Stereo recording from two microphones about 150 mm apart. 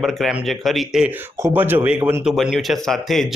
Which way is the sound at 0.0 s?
Centre (ahead or behind).